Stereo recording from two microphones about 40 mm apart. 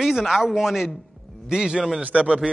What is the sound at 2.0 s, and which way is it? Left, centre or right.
Speech, right.